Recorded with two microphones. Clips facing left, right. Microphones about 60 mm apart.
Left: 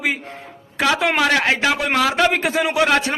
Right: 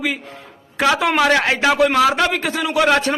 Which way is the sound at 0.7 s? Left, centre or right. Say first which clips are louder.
Right 2 dB; centre.